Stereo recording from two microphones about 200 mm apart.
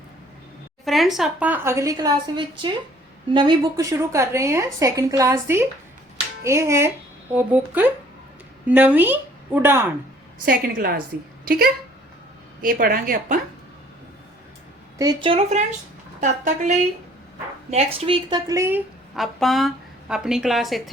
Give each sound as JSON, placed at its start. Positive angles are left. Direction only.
{"t": 0.9, "sound": "a woman's voice", "side_deg": 0}
{"t": 10.4, "sound": "a woman's voice", "side_deg": -45}
{"t": 14.9, "sound": "a woman's voice", "side_deg": -20}
{"t": 19.1, "sound": "speech", "side_deg": 0}